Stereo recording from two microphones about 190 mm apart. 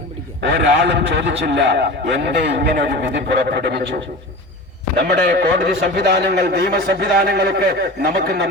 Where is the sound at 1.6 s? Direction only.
70° right (ahead or behind).